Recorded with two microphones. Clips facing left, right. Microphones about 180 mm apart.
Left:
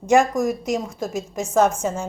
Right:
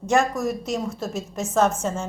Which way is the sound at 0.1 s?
15° left (ahead or behind).